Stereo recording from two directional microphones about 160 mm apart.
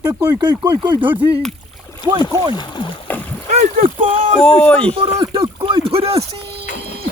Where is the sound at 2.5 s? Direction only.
30° left (ahead or behind).